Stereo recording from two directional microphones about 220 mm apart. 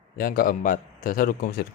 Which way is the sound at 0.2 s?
40° left (ahead or behind).